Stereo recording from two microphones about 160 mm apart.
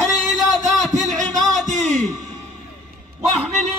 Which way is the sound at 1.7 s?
Centre (ahead or behind).